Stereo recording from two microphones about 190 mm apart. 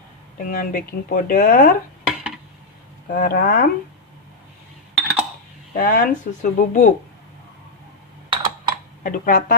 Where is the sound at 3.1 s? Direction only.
50° left (ahead or behind).